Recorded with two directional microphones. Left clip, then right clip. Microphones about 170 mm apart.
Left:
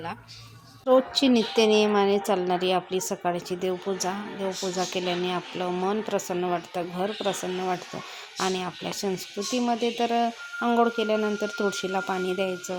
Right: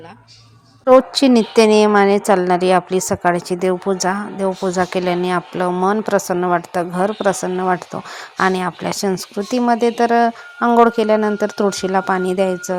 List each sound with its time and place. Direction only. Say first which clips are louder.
0.9 s a woman's voice: right 10 dB; 40° right (ahead or behind)